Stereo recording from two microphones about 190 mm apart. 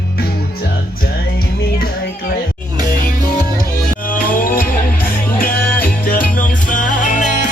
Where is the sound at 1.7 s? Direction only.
50° left (ahead or behind).